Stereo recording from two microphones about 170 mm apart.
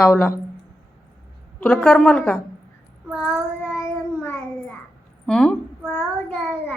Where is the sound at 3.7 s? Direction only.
15° left (ahead or behind).